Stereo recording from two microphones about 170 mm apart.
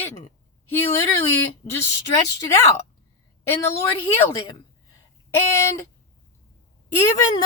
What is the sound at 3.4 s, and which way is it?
Speech, 15° left (ahead or behind).